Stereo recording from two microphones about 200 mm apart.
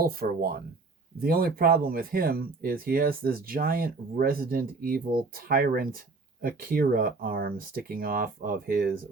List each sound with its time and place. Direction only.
0.0 s speech: 50° right (ahead or behind)